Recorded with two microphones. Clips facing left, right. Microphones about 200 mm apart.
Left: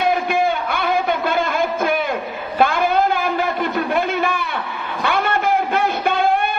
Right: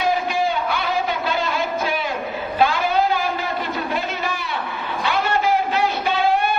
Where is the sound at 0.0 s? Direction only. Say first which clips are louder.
Left 3 dB; 55° left (ahead or behind).